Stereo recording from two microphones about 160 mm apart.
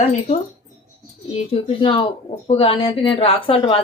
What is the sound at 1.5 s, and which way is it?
A woman's voice, 35° left (ahead or behind).